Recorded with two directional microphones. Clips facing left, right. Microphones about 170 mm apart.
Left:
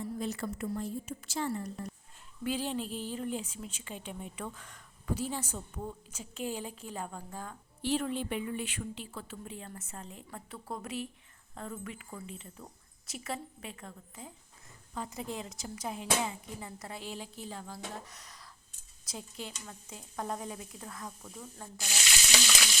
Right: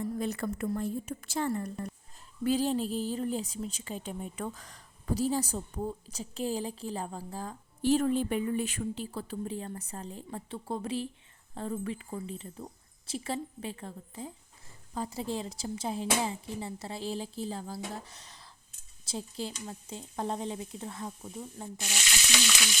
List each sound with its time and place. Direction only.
0.2 s a woman's voice: 55° right (ahead or behind)
2.4 s a woman's voice: 40° right (ahead or behind)